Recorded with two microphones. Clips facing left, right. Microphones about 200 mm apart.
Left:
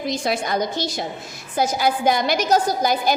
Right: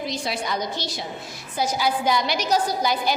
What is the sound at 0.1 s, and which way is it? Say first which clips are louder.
A woman's voice: left 5 dB; 50° left (ahead or behind).